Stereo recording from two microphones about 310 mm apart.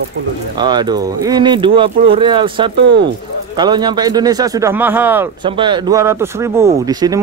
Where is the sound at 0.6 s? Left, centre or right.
Centre.